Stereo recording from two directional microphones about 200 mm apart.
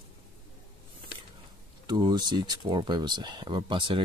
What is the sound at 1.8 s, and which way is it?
Speech, 20° right (ahead or behind).